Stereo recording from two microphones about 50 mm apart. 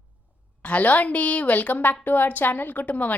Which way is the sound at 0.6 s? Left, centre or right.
Left.